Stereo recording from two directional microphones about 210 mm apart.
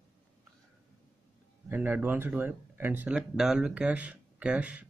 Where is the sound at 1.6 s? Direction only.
10° right (ahead or behind).